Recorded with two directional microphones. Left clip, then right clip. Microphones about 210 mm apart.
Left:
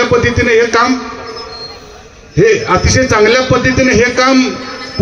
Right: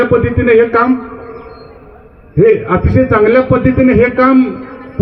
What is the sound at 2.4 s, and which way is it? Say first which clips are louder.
A man's voice: even; 15° right (ahead or behind).